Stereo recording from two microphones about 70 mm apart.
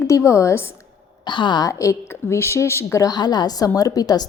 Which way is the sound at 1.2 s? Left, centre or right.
Left.